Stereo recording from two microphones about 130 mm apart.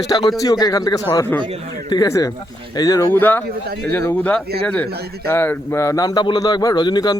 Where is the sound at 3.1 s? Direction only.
15° left (ahead or behind).